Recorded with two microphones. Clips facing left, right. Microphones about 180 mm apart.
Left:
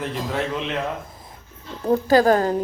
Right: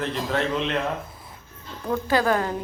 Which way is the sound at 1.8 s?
40° left (ahead or behind).